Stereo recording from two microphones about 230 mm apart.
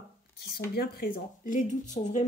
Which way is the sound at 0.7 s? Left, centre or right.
Left.